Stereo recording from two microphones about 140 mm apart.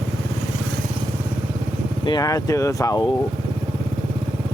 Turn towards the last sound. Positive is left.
turn(degrees=25)  # may be behind; listen again after turning